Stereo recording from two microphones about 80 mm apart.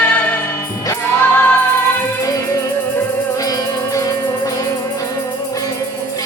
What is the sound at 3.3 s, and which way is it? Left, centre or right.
Music, left.